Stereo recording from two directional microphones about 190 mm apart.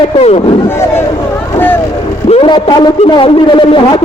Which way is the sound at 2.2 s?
30° left (ahead or behind).